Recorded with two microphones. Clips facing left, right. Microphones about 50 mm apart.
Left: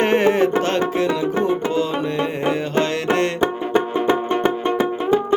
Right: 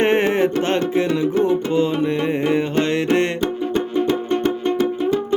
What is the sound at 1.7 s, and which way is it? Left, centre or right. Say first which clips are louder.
Music: right 2 dB; right.